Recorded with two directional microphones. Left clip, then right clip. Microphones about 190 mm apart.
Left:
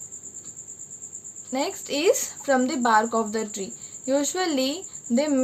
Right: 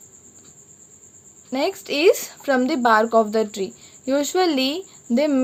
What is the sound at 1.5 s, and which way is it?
A woman's voice, 40° right (ahead or behind).